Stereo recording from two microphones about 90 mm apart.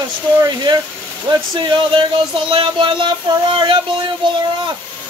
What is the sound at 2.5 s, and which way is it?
Music, 65° right (ahead or behind).